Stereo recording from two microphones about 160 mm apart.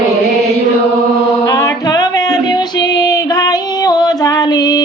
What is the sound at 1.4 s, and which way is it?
Music, 25° left (ahead or behind).